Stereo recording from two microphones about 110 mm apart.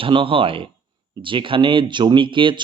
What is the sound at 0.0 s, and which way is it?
Speech, 50° right (ahead or behind).